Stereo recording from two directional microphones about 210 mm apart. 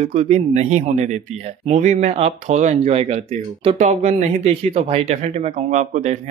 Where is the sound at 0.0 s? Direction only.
30° right (ahead or behind).